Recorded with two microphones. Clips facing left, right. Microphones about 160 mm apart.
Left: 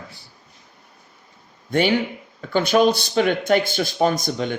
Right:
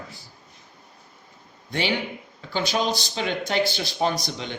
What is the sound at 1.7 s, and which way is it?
Speech, 50° left (ahead or behind).